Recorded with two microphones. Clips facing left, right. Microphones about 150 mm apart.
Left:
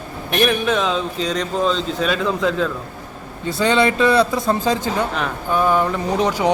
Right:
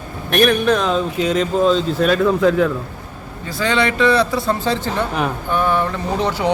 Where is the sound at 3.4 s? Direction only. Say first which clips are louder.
Left 2 dB; 20° left (ahead or behind).